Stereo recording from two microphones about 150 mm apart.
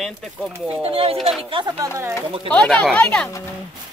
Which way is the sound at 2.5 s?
5° left (ahead or behind).